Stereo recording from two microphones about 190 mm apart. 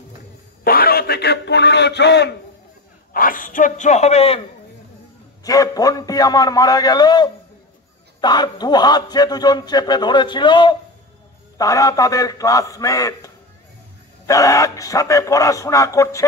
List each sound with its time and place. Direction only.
0.7 s a sound: 50° left (ahead or behind)
3.1 s a man's voice: 45° left (ahead or behind)
5.4 s a man's voice: 20° left (ahead or behind)